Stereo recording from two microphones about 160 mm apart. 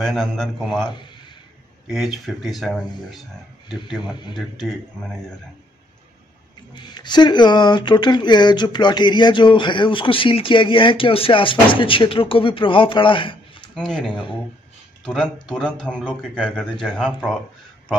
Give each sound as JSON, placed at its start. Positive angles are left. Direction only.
{"t": 0.0, "sound": "speech", "side_deg": 0}
{"t": 1.9, "sound": "speech", "side_deg": 0}
{"t": 6.7, "sound": "speech", "side_deg": 30}
{"t": 13.7, "sound": "speech", "side_deg": 5}
{"t": 15.5, "sound": "speech", "side_deg": 5}